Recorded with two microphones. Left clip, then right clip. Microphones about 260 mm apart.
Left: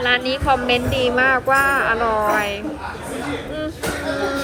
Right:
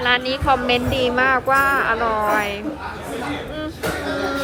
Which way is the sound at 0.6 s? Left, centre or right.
Right.